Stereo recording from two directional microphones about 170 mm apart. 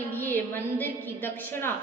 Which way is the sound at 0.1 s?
10° left (ahead or behind).